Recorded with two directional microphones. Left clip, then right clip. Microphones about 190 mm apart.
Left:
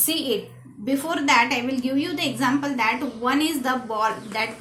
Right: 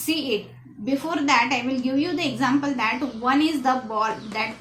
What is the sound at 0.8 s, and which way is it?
A woman's voice, 35° left (ahead or behind).